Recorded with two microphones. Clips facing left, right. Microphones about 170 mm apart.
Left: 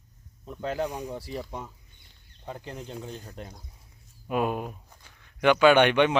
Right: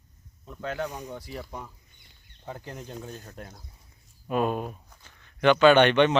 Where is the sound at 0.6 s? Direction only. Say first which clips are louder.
Left 2 dB; 30° left (ahead or behind).